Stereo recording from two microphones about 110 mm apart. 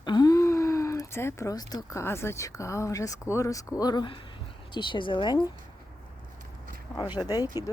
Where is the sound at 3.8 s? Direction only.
40° left (ahead or behind).